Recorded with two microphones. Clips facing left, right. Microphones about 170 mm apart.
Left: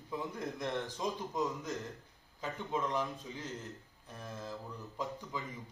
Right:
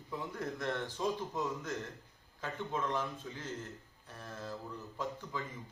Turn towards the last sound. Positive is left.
turn(degrees=15)  # may be behind; listen again after turning